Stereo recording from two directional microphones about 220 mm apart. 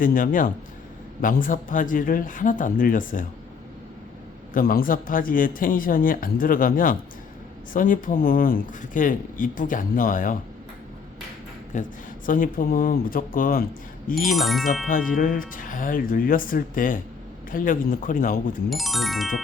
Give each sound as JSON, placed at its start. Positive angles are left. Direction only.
{"t": 0.0, "sound": "speech", "side_deg": 40}
{"t": 4.5, "sound": "speech", "side_deg": 40}
{"t": 11.7, "sound": "speech", "side_deg": 35}
{"t": 14.2, "sound": "speech", "side_deg": 0}
{"t": 14.8, "sound": "speech", "side_deg": 40}
{"t": 18.7, "sound": "speech", "side_deg": 0}